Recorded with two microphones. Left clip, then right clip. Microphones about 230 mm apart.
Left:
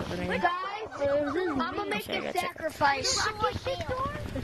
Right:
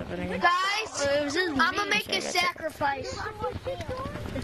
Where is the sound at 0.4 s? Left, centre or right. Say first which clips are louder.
Right 6 dB; right.